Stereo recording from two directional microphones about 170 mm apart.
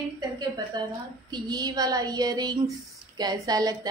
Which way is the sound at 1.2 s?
25° right (ahead or behind).